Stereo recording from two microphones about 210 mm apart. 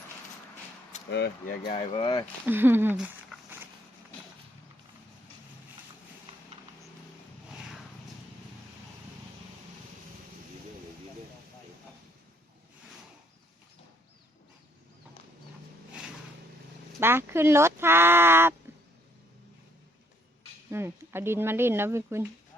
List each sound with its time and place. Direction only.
1.1 s speech: 50° left (ahead or behind)
1.7 s speech: 25° left (ahead or behind)
2.5 s speech: 10° right (ahead or behind)
3.3 s walk: 5° right (ahead or behind)
17.0 s speech: 10° right (ahead or behind)
20.7 s speech: 10° right (ahead or behind)